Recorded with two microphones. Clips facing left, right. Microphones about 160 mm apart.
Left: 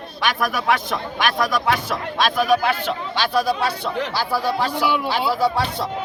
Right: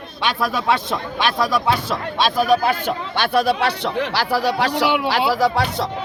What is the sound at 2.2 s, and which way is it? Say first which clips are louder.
Speech: right 1 dB; 35° right (ahead or behind).